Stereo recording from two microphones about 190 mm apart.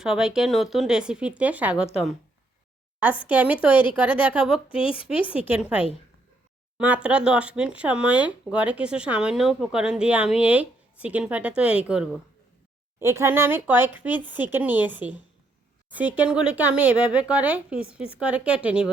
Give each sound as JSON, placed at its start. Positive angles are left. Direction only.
{"t": 0.0, "sound": "speech", "side_deg": -5}
{"t": 3.2, "sound": "speech", "side_deg": -10}
{"t": 4.7, "sound": "speech", "side_deg": 30}
{"t": 5.5, "sound": "speech", "side_deg": -5}
{"t": 13.0, "sound": "speech", "side_deg": -15}